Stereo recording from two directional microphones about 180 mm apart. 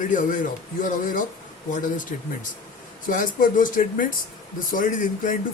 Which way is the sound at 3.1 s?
50° left (ahead or behind).